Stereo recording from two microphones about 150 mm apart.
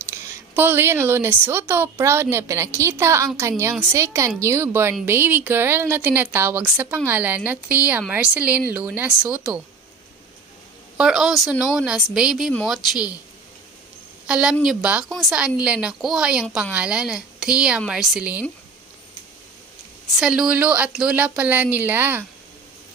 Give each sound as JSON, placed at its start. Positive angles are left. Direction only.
{"t": 0.6, "sound": "a woman's voice", "side_deg": -15}
{"t": 11.0, "sound": "a woman's voice", "side_deg": -5}
{"t": 14.2, "sound": "a woman's voice", "side_deg": -5}
{"t": 20.2, "sound": "a woman's voice", "side_deg": -5}